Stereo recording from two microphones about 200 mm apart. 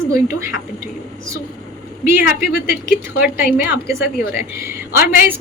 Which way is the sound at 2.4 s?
50° left (ahead or behind).